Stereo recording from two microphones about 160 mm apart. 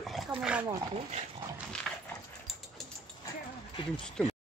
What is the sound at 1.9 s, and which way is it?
Dog, centre (ahead or behind).